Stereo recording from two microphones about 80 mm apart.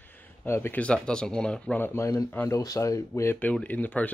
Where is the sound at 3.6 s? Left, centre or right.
Centre.